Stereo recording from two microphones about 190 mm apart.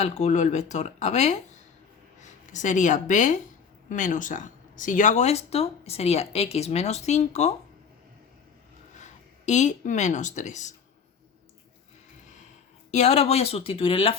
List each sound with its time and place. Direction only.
0.0 s speech: 35° left (ahead or behind)
9.5 s speech: 40° left (ahead or behind)
12.9 s speech: 35° left (ahead or behind)